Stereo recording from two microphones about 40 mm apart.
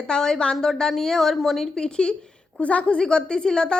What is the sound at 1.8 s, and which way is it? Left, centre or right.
Speech, left.